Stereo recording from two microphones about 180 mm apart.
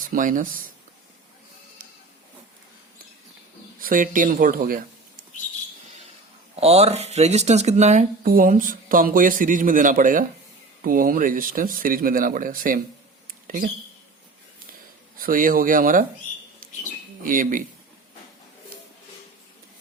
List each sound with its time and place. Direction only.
0.0 s speech: 45° right (ahead or behind)
3.8 s speech: 50° right (ahead or behind)
6.6 s speech: 35° right (ahead or behind)
8.2 s speech: 50° right (ahead or behind)
13.2 s a sound: 50° right (ahead or behind)
15.3 s speech: 50° right (ahead or behind)
17.2 s speech: 50° right (ahead or behind)